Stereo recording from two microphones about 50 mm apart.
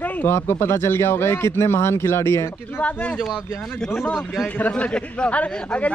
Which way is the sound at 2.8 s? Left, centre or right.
Left.